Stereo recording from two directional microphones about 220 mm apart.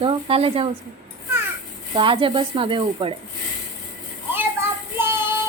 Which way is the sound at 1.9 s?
25° right (ahead or behind).